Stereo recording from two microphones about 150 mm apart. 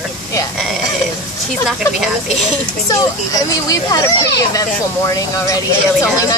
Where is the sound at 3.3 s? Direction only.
20° left (ahead or behind).